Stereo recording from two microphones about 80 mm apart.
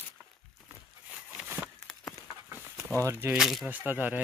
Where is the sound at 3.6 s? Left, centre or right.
Right.